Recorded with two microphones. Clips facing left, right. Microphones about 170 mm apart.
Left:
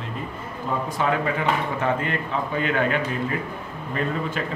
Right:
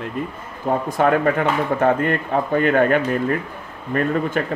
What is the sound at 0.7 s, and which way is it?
Speech, 55° right (ahead or behind).